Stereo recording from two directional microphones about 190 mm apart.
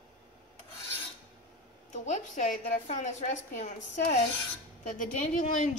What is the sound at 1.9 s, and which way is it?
A woman's voice, 40° left (ahead or behind).